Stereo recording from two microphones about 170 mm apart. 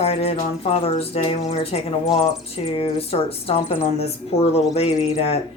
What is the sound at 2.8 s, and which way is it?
Speech, 35° left (ahead or behind).